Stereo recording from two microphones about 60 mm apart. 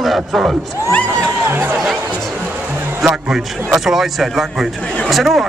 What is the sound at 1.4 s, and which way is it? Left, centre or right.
Speech, right.